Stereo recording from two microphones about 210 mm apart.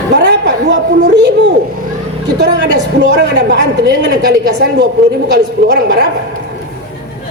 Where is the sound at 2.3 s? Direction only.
55° right (ahead or behind).